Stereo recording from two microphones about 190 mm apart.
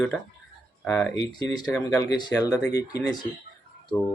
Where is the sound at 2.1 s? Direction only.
20° left (ahead or behind).